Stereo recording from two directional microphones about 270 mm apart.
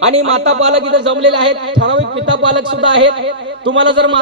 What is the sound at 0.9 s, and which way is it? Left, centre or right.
A man's voice, right.